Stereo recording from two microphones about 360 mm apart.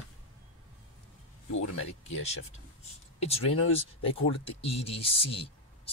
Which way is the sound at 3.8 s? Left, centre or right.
Centre.